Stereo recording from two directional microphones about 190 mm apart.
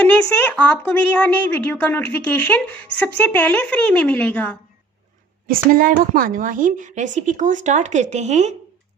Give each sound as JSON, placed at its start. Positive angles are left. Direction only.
{"t": 0.5, "sound": "a woman's voice", "side_deg": 5}
{"t": 5.5, "sound": "a woman's voice", "side_deg": -50}